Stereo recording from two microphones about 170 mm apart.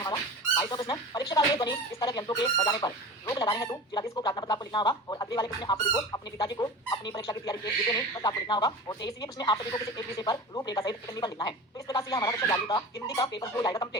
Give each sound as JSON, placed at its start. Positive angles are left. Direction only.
{"t": 0.0, "sound": "speech", "side_deg": 25}